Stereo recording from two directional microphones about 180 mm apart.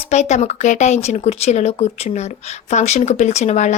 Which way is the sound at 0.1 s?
40° left (ahead or behind).